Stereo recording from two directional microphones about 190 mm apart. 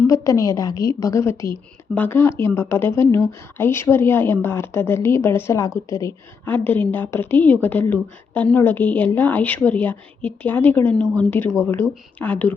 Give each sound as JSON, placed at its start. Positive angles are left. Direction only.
{"t": 0.1, "sound": "speech", "side_deg": 15}